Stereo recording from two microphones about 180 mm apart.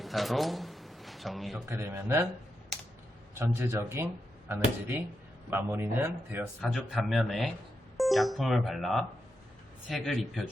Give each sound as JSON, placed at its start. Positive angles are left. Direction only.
{"t": 0.0, "sound": "a sound", "side_deg": 0}
{"t": 1.7, "sound": "speech", "side_deg": -10}
{"t": 3.3, "sound": "speech", "side_deg": -10}
{"t": 6.6, "sound": "speech", "side_deg": 0}